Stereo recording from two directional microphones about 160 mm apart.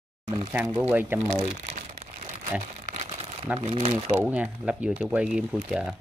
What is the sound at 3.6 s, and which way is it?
Speech, 40° right (ahead or behind).